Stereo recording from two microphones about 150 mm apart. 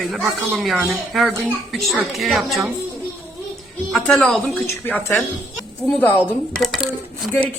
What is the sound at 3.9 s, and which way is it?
Speech, 5° left (ahead or behind).